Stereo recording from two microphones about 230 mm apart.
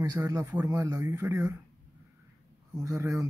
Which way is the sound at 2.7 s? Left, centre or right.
Centre.